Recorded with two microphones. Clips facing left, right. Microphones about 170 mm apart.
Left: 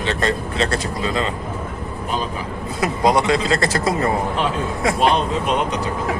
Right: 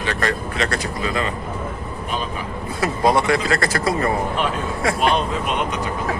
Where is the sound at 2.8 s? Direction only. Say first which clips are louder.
Left 1 dB; 20° left (ahead or behind).